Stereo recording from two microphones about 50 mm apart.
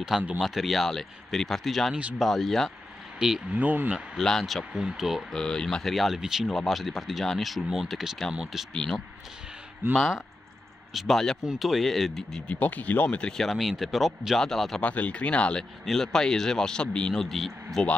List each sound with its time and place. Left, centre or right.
0.4 s speech: centre
3.2 s speech: centre
3.4 s speech: right
4.2 s a man's voice: centre
4.7 s speech: centre
5.3 s a man's voice: centre
5.9 s speech: centre
6.5 s speech: centre
9.8 s speech: right
10.9 s speech: centre
12.5 s speech: left
13.4 s speech: centre
14.8 s speech: left
15.8 s a man's voice: centre